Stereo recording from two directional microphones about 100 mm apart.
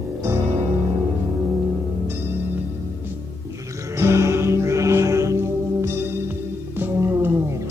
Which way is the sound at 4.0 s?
30° right (ahead or behind).